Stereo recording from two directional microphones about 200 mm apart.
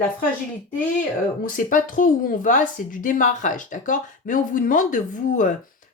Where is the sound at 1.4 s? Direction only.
45° left (ahead or behind).